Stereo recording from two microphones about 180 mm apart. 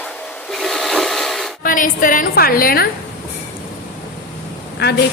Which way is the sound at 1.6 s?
50° left (ahead or behind).